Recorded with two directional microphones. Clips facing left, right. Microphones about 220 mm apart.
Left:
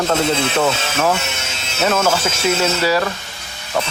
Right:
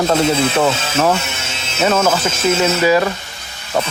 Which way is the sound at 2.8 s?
15° right (ahead or behind).